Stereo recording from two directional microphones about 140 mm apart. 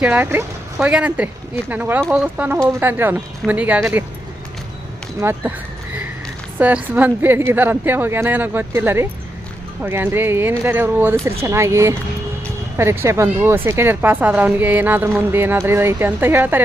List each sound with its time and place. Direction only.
0.0 s a woman's voice: 10° right (ahead or behind)
5.2 s a woman's voice: 15° right (ahead or behind)
6.6 s a woman's voice: 10° right (ahead or behind)